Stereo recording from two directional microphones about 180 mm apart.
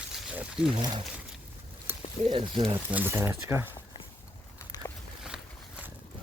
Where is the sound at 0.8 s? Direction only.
25° right (ahead or behind).